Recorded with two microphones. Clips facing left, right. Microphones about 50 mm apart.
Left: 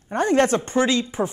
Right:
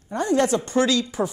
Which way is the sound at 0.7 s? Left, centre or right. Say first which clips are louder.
Even; left.